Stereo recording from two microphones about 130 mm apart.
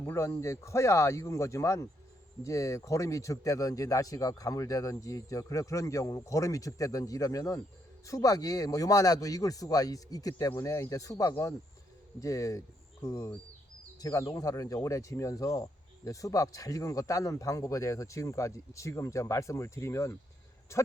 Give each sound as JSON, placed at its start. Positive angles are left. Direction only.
{"t": 0.0, "sound": "speech", "side_deg": 20}